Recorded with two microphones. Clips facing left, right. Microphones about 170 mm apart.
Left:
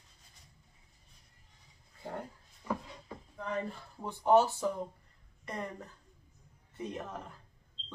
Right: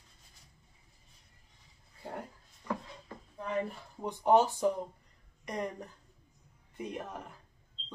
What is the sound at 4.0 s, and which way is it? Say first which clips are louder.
Speech: even; 15° right (ahead or behind).